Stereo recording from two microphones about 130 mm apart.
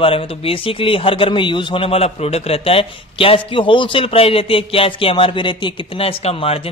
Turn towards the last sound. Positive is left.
turn(degrees=50)  # may be behind; listen again after turning